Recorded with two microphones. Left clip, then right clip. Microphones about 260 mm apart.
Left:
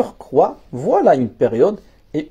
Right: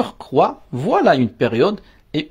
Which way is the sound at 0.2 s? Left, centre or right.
Right.